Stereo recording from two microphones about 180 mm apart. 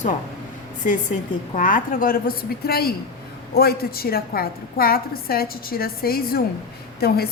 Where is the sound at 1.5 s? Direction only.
45° left (ahead or behind).